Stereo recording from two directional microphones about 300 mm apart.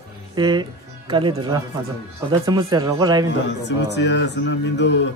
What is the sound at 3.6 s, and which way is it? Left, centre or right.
Speech, left.